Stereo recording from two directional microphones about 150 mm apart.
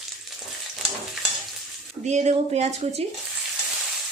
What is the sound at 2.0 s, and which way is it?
Speech, 50° right (ahead or behind).